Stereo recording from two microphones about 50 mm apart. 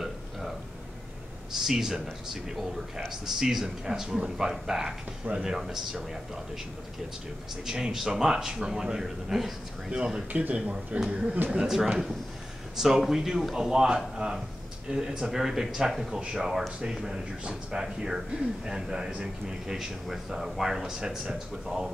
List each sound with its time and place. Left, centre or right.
0.0 s burping: centre
1.6 s speech: centre
3.1 s speech: centre
7.6 s speech: centre
10.3 s speech: right; by 21.9 s centre